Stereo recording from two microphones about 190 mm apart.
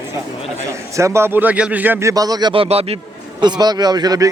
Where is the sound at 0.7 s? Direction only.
15° right (ahead or behind); by 3.0 s 30° right (ahead or behind).